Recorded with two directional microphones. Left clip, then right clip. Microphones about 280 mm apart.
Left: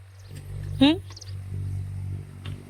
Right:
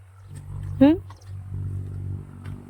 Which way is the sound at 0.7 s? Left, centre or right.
Centre.